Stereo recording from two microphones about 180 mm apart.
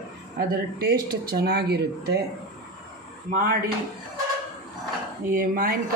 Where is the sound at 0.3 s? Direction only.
60° right (ahead or behind).